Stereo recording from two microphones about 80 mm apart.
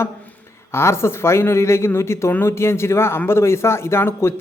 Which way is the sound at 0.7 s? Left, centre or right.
Left.